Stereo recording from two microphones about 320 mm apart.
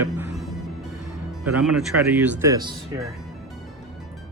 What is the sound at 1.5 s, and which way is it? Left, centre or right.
Speech, centre.